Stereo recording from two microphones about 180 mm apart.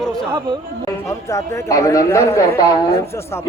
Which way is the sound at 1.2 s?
15° left (ahead or behind).